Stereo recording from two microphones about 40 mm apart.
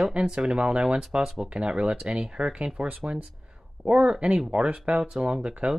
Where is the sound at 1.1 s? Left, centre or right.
Centre.